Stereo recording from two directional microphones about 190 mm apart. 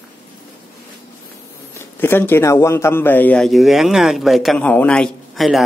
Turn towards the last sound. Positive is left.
turn(degrees=0)  # may be behind; listen again after turning